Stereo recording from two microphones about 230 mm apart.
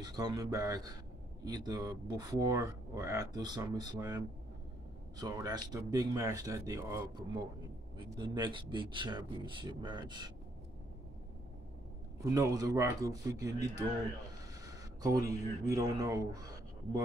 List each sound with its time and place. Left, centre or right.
0.0 s speech: centre
8.1 s speech: centre
12.2 s speech: centre
14.7 s speech: centre